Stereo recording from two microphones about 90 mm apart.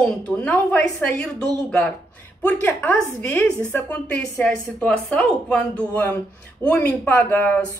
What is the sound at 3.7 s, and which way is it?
Speech, 15° left (ahead or behind).